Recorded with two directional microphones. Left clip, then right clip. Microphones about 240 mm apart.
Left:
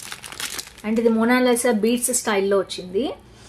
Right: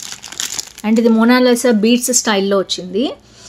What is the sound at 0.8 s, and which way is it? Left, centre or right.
A woman's voice, right.